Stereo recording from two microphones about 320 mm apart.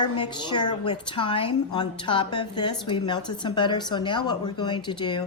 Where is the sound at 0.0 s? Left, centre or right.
Centre.